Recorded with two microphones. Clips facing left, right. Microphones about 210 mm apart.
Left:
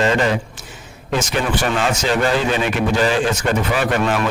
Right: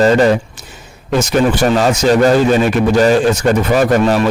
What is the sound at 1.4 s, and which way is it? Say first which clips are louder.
A man's voice: right 9 dB; 40° right (ahead or behind).